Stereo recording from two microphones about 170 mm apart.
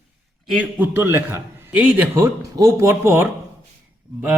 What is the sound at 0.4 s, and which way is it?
A man's voice, 5° right (ahead or behind).